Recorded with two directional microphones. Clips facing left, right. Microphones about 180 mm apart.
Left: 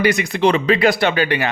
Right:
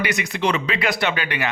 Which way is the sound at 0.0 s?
35° left (ahead or behind).